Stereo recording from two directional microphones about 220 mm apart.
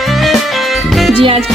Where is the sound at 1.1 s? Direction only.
25° right (ahead or behind).